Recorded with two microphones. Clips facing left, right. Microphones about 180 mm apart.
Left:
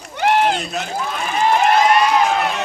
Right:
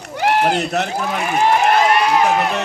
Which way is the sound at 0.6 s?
70° right (ahead or behind).